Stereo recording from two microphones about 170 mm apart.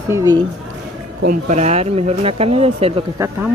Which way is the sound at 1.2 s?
50° right (ahead or behind).